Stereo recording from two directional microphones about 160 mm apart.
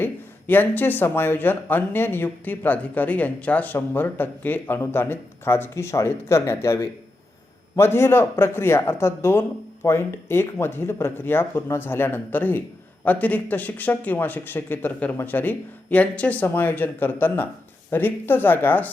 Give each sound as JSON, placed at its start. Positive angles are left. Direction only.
{"t": 0.0, "sound": "speech", "side_deg": 10}